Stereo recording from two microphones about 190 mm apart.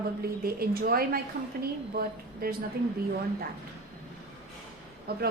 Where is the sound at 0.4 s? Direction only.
50° right (ahead or behind).